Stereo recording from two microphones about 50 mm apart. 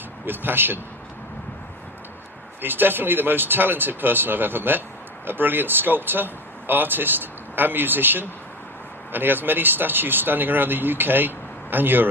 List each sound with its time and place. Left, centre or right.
0.3 s speech: right
2.6 s speech: right